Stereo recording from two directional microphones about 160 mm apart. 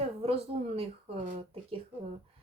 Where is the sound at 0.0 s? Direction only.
40° right (ahead or behind).